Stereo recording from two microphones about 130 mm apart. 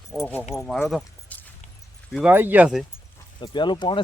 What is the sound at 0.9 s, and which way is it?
Keys jangling, 5° left (ahead or behind).